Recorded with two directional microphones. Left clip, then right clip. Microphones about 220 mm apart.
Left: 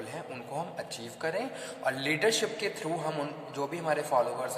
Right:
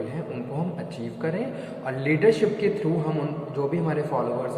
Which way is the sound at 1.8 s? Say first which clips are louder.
Right 7 dB; 60° left (ahead or behind).